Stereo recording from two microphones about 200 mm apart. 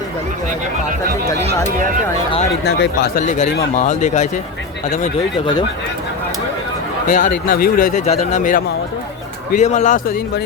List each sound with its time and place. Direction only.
2.6 s speech: 60° left (ahead or behind)
3.2 s speech: 40° left (ahead or behind)
7.1 s speech: 40° left (ahead or behind)